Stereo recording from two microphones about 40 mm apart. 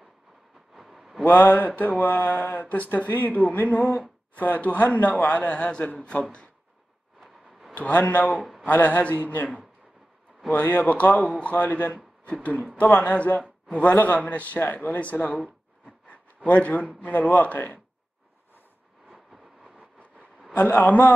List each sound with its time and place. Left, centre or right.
0.7 s a sound: centre
1.2 s a man's voice: left
7.7 s speech: left
8.4 s speech: centre
8.6 s speech: left
10.5 s a man's voice: left
14.7 s speech: left
15.0 s a man's voice: left
15.3 s a sound: left
16.4 s a man's voice: left
19.0 s vehicle: centre
20.6 s speech: left